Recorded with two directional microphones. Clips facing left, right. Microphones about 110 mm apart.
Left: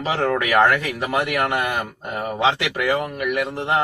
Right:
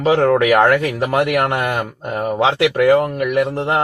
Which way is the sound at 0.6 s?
45° right (ahead or behind).